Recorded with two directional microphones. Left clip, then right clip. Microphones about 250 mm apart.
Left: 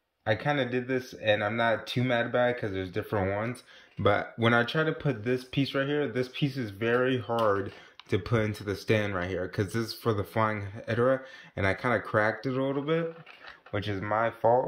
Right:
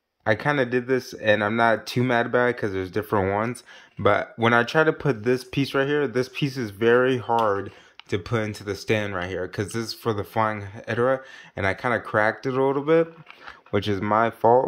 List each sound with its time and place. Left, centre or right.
0.2 s speech: centre
4.0 s speech: centre; by 14.6 s right